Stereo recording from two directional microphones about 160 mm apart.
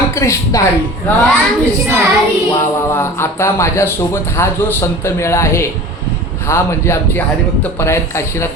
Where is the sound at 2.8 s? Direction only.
15° left (ahead or behind).